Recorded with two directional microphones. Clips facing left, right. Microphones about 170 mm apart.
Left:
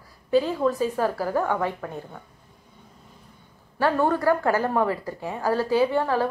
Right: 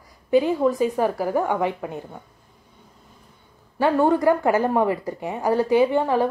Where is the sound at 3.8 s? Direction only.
15° right (ahead or behind).